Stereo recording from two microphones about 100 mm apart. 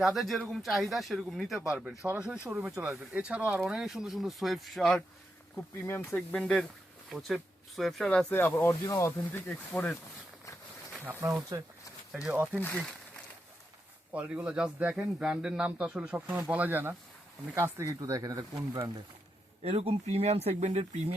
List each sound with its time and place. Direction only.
0.0 s speech: centre (ahead or behind)
5.8 s speech: 25° left (ahead or behind)
6.3 s speech: 10° left (ahead or behind)
8.3 s speech: 20° left (ahead or behind)
8.8 s speech: 30° left (ahead or behind)
9.5 s speech: 10° left (ahead or behind)
11.0 s speech: 20° right (ahead or behind)
12.5 s speech: 20° left (ahead or behind)
14.1 s speech: 15° right (ahead or behind); by 18.9 s 40° right (ahead or behind)
19.6 s speech: 70° right (ahead or behind); by 21.0 s 90° right